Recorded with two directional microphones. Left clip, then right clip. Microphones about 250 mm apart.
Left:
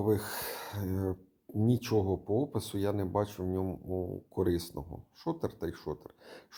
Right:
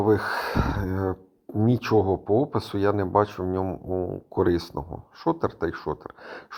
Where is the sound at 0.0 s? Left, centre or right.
Centre.